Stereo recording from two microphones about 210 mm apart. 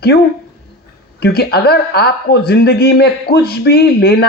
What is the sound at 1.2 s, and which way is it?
Speech, 50° left (ahead or behind).